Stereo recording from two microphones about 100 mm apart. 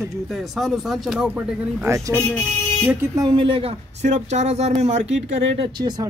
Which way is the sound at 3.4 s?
60° right (ahead or behind).